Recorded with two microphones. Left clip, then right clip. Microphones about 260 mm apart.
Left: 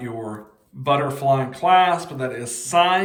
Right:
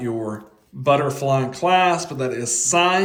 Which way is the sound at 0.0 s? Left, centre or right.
Centre.